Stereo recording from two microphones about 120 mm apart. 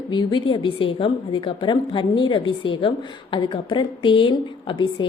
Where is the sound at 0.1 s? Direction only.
40° left (ahead or behind).